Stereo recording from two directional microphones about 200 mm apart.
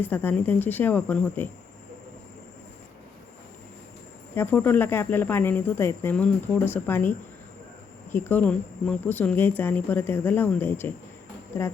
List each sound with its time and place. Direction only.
0.0 s speech: 10° left (ahead or behind)
4.4 s speech: 10° left (ahead or behind)